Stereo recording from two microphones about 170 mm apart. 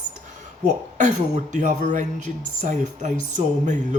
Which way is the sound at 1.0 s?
45° right (ahead or behind).